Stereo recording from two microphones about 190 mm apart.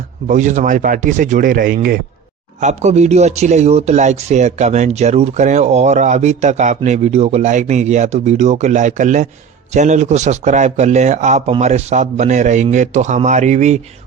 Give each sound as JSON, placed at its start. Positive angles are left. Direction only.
{"t": 0.3, "sound": "speech", "side_deg": -40}
{"t": 2.6, "sound": "speech", "side_deg": -35}